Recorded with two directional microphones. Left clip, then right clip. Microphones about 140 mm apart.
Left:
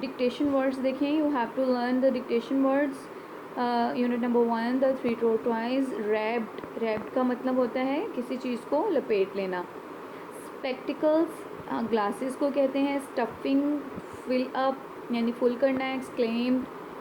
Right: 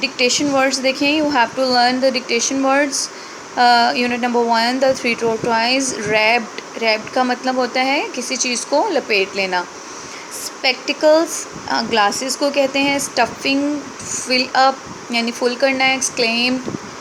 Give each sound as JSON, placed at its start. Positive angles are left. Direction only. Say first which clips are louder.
{"t": 0.0, "sound": "speech", "louder": "right 11 dB", "side_deg": -25}